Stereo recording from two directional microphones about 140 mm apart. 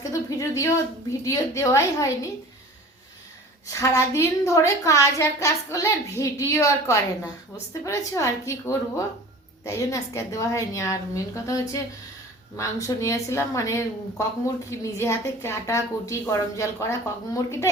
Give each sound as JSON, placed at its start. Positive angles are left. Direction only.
{"t": 0.0, "sound": "a woman's voice", "side_deg": 25}
{"t": 3.7, "sound": "a woman's voice", "side_deg": 25}